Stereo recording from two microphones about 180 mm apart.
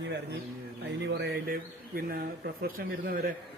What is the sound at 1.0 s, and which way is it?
A man's voice, 65° right (ahead or behind).